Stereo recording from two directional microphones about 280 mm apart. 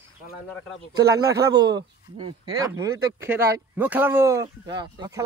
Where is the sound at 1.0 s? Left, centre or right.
Centre.